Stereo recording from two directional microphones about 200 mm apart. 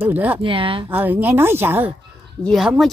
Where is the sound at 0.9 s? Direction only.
10° right (ahead or behind).